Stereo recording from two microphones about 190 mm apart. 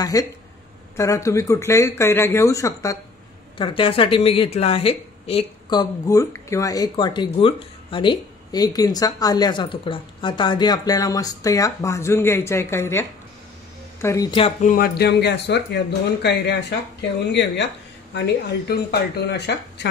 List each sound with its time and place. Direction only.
0.0 s speech: 20° left (ahead or behind)
3.5 s speech: 25° left (ahead or behind)
14.0 s speech: 20° left (ahead or behind)
14.4 s speech: 45° left (ahead or behind); by 19.9 s 60° left (ahead or behind)